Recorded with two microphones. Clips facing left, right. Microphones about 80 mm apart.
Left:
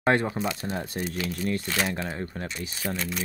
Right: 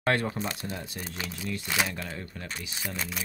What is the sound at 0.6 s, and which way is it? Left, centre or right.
Speech, left.